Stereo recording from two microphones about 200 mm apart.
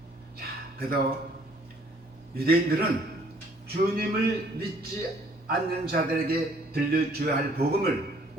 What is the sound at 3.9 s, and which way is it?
Speech, 50° right (ahead or behind).